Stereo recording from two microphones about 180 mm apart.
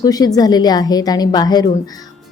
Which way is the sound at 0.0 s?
20° left (ahead or behind).